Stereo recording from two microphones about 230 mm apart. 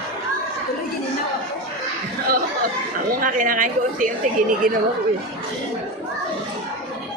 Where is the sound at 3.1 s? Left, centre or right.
Right.